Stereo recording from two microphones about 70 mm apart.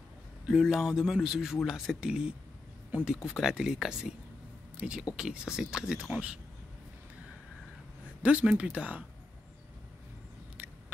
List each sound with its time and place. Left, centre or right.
0.5 s speech: centre
1.6 s speech: centre
2.0 s speech: centre
8.2 s speech: centre
10.6 s a sound: right